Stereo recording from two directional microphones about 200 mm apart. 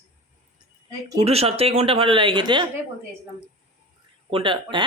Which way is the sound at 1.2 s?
30° right (ahead or behind).